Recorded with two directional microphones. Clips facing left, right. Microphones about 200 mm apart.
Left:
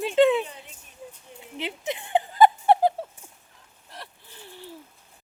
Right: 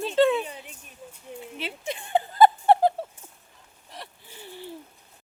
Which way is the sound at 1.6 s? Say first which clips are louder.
Left 4 dB; 20° left (ahead or behind).